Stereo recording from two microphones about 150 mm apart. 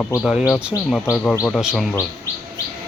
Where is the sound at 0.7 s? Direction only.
25° left (ahead or behind).